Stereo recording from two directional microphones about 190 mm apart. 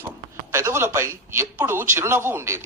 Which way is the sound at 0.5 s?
15° right (ahead or behind).